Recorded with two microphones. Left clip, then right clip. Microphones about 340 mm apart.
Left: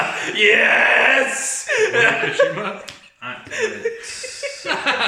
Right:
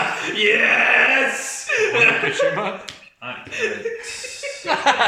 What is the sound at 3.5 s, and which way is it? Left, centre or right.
Speech, left.